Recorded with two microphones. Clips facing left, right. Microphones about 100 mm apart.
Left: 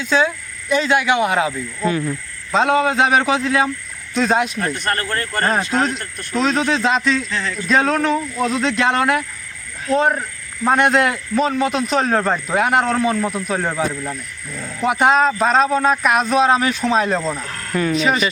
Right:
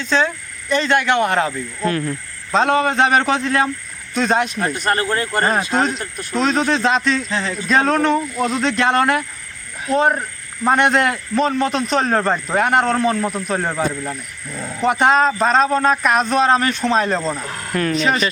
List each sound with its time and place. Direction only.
0.0 s speech: 10° left (ahead or behind)
7.3 s speech: 20° right (ahead or behind)
7.7 s speech: centre (ahead or behind)